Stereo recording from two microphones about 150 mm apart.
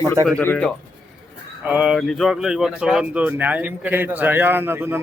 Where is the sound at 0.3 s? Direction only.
10° left (ahead or behind).